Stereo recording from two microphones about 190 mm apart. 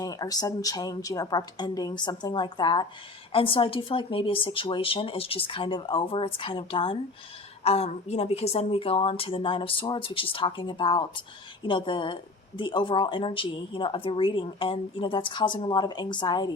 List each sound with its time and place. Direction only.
0.0 s speech: 20° left (ahead or behind)